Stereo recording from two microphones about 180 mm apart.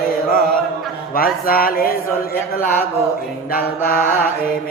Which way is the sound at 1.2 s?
55° left (ahead or behind).